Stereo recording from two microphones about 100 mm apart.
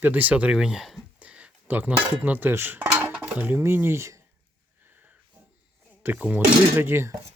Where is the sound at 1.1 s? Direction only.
15° right (ahead or behind).